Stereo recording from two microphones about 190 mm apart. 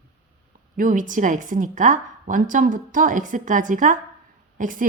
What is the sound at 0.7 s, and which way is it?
A woman's voice, 45° right (ahead or behind).